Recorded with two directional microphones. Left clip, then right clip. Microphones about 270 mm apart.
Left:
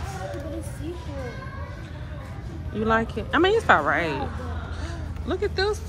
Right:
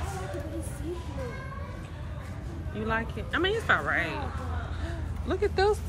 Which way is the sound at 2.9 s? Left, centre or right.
Centre.